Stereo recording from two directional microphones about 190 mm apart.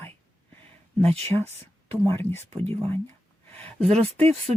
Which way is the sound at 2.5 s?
30° right (ahead or behind).